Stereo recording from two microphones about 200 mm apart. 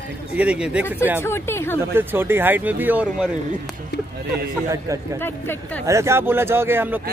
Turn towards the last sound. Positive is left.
turn(degrees=-10)  # may be behind; listen again after turning